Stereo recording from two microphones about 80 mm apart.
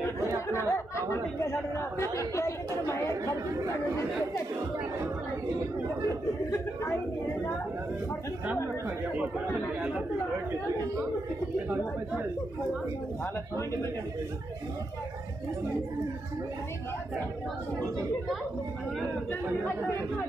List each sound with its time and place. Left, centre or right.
0.5 s speech: left